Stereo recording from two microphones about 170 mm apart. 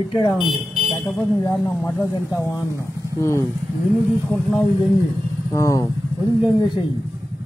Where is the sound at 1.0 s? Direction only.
15° left (ahead or behind).